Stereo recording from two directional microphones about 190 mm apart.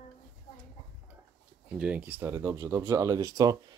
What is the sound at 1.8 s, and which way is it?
Speech, 10° right (ahead or behind).